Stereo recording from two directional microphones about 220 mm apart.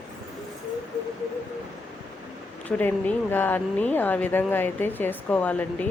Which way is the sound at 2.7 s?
5° left (ahead or behind).